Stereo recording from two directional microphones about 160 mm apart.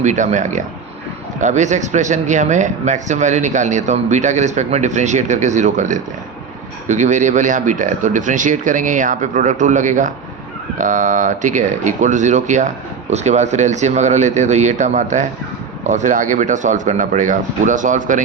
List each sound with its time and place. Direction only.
0.0 s speech: 50° right (ahead or behind)